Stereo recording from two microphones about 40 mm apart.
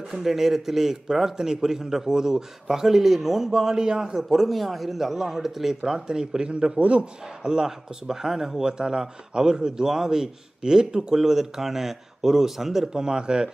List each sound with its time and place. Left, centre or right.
0.1 s speech: centre
4.2 s a man's voice: centre; by 6.8 s right
6.8 s a man's voice: right
7.4 s speech: centre